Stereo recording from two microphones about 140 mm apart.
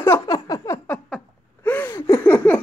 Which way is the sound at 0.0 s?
20° left (ahead or behind).